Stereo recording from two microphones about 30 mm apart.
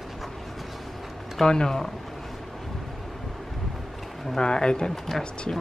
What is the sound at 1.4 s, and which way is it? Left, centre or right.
Speech, left.